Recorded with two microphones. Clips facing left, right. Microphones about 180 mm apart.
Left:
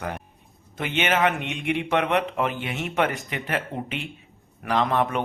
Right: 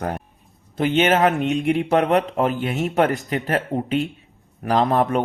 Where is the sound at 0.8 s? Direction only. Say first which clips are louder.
Right 6 dB; 35° right (ahead or behind).